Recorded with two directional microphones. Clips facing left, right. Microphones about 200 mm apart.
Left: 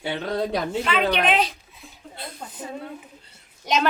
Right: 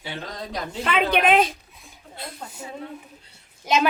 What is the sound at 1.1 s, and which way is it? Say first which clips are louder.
Speech: right 3 dB; 50° right (ahead or behind).